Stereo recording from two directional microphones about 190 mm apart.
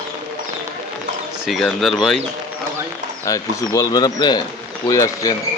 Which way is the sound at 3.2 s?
15° left (ahead or behind).